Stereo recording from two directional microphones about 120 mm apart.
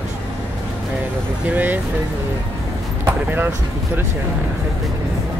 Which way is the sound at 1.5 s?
15° right (ahead or behind).